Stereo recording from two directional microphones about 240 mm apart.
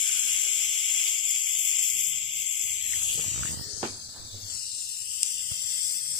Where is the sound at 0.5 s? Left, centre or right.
Left.